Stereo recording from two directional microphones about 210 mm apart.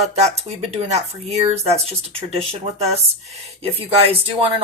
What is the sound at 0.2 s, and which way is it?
Speech, 30° right (ahead or behind).